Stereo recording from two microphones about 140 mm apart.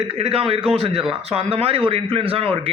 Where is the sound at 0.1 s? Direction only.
45° right (ahead or behind).